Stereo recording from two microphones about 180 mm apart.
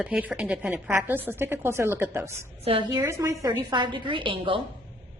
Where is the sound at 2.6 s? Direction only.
30° right (ahead or behind).